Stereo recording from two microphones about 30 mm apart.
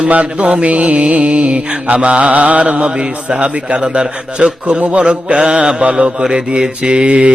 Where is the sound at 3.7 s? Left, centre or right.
Right.